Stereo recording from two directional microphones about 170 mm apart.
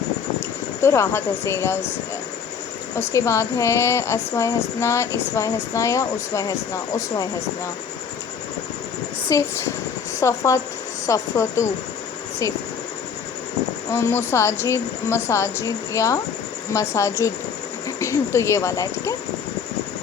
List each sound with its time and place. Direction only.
0.3 s speech: 15° left (ahead or behind)
3.0 s speech: 15° left (ahead or behind)
9.3 s speech: 15° left (ahead or behind)
13.9 s speech: 15° left (ahead or behind)